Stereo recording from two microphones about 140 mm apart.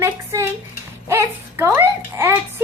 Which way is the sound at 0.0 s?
20° right (ahead or behind).